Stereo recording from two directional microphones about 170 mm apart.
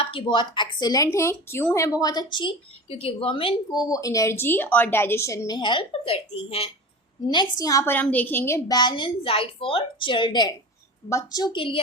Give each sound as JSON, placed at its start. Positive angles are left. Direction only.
{"t": 0.0, "sound": "speech", "side_deg": 35}
{"t": 3.8, "sound": "a woman's voice", "side_deg": 20}
{"t": 7.6, "sound": "speech", "side_deg": 20}